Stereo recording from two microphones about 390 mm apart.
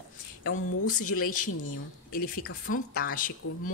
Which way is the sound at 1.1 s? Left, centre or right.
Left.